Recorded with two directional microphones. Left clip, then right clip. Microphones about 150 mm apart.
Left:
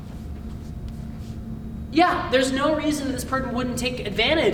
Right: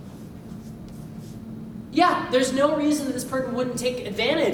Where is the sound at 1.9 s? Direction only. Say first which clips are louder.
Left 1 dB; 20° left (ahead or behind).